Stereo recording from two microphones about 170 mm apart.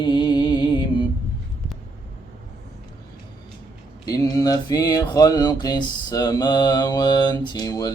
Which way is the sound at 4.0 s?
20° left (ahead or behind).